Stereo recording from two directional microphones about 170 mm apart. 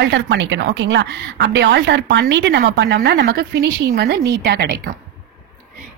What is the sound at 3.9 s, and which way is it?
Speech, 75° right (ahead or behind).